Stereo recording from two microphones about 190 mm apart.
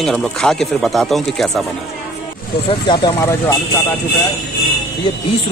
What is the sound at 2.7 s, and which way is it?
Speech, 25° left (ahead or behind).